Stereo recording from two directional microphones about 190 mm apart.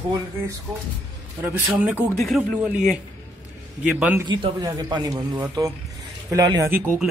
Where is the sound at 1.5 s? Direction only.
10° right (ahead or behind).